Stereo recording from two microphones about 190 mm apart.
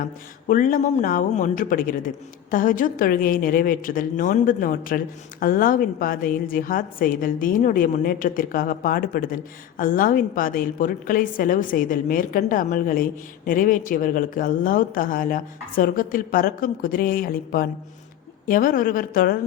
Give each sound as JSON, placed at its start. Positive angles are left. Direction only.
{"t": 0.0, "sound": "a woman's voice", "side_deg": 45}